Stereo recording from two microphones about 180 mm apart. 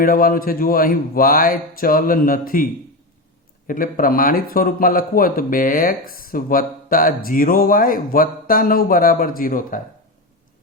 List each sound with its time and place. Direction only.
0.0 s a man's voice: 55° left (ahead or behind)
3.7 s a man's voice: 50° left (ahead or behind)